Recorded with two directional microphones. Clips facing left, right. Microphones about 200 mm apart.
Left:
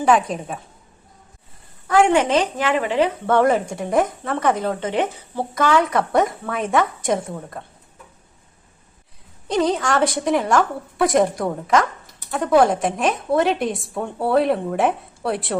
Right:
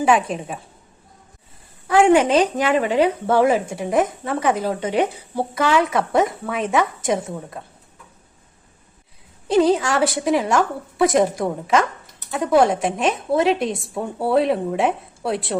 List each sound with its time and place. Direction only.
0.0 s a woman's voice: 5° right (ahead or behind)
1.9 s speech: 10° right (ahead or behind)
2.7 s speech: 40° right (ahead or behind)
3.3 s a woman's voice: 5° right (ahead or behind)
5.7 s a woman's voice: centre (ahead or behind)
9.5 s a woman's voice: 5° right (ahead or behind)